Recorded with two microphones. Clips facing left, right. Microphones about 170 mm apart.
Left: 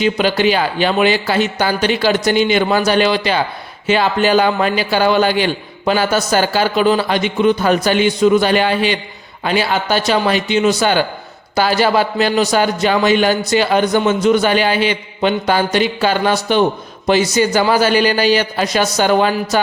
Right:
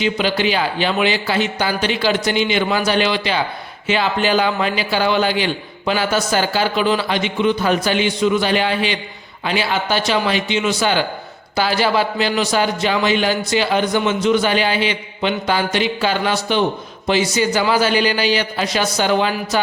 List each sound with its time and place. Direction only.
0.0 s a man's voice: 45° left (ahead or behind)